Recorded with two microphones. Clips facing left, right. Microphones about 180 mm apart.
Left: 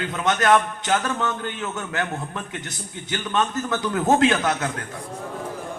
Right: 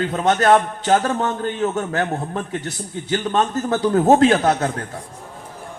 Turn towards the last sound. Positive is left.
turn(degrees=-35)  # may be behind; listen again after turning